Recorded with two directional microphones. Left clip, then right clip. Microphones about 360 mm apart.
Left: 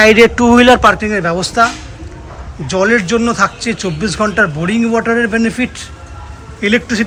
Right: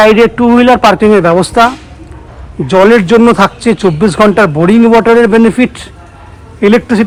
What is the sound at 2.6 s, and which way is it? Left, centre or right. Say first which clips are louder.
A man's voice: right 7 dB; centre.